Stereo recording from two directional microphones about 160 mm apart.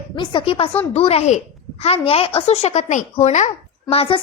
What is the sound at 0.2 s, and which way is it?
A woman's voice, 30° left (ahead or behind).